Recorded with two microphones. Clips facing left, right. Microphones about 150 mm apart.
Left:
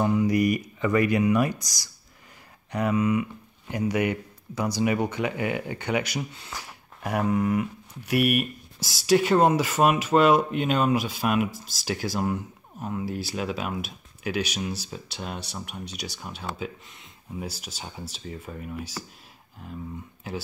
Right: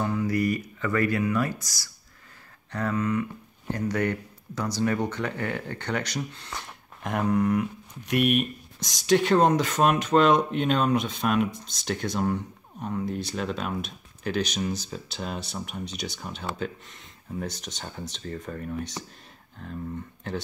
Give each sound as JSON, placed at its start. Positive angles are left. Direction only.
{"t": 0.0, "sound": "speech", "side_deg": 20}